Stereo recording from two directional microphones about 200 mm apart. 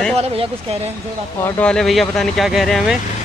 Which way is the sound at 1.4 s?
5° left (ahead or behind).